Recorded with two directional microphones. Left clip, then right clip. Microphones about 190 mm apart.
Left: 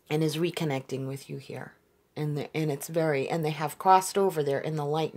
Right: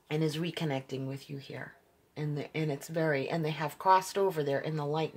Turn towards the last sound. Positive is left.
turn(degrees=40)  # may be behind; listen again after turning